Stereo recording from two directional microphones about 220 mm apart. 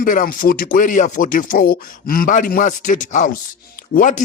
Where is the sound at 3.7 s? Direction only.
40° left (ahead or behind).